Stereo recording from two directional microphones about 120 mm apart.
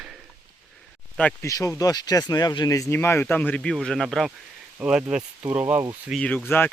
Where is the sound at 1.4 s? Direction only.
25° left (ahead or behind).